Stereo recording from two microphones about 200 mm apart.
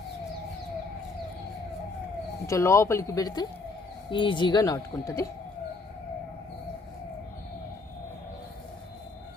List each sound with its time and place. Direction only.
2.5 s speech: 15° left (ahead or behind)